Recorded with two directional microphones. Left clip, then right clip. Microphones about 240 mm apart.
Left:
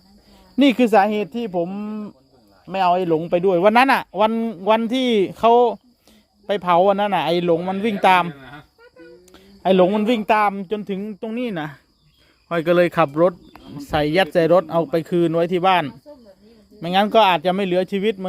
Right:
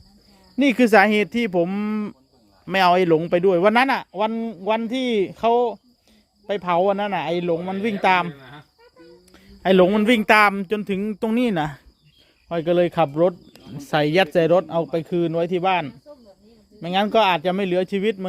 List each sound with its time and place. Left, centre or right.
0.5 s speech: centre
0.8 s speech: centre
12.5 s speech: centre
13.7 s speech: centre